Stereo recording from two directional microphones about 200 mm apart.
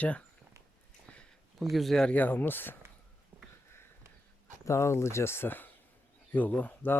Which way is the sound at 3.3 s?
10° right (ahead or behind).